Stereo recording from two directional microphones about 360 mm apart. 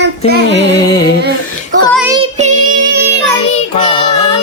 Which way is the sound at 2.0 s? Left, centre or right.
Centre.